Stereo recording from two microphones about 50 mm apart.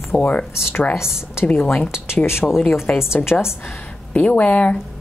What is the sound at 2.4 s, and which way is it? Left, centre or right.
Speech, centre.